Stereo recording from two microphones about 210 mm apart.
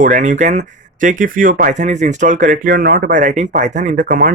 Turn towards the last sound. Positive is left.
turn(degrees=-40)  # may be behind; listen again after turning